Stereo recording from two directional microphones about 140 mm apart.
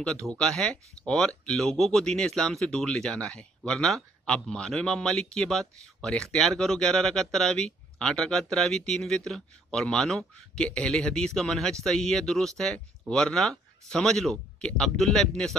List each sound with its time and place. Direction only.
0.0 s speech: 5° left (ahead or behind)